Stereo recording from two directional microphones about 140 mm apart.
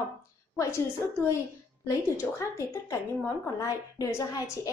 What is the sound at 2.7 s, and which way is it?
A woman's voice, 20° left (ahead or behind).